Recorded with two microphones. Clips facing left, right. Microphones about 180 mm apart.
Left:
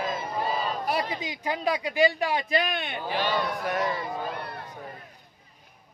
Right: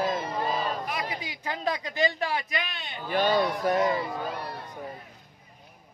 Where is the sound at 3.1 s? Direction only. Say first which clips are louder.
Right 4 dB; 45° right (ahead or behind).